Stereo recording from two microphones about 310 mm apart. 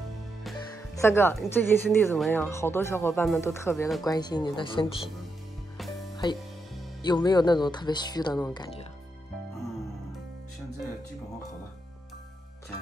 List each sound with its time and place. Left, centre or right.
0.4 s speech: centre
7.0 s speech: centre